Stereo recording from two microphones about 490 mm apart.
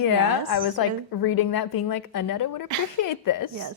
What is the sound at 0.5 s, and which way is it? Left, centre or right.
A woman's voice, left.